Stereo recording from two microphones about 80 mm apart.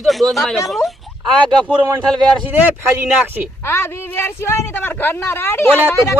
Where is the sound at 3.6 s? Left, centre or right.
Left.